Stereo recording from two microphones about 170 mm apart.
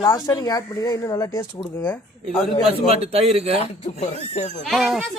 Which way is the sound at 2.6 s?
35° right (ahead or behind).